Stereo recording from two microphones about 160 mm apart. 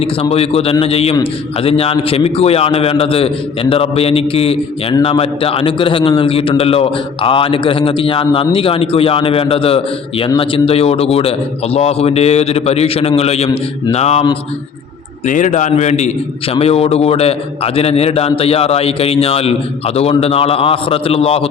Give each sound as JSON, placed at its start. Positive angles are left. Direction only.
{"t": 0.0, "sound": "a man's voice", "side_deg": 40}
{"t": 15.3, "sound": "a man's voice", "side_deg": 50}